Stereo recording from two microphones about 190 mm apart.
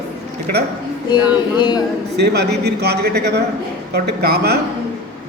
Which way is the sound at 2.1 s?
60° right (ahead or behind).